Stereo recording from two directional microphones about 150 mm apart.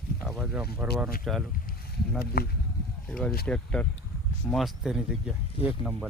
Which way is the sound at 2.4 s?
90° left.